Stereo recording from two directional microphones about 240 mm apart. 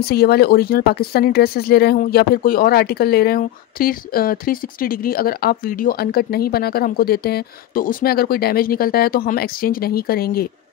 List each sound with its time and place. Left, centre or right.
0.0 s speech: left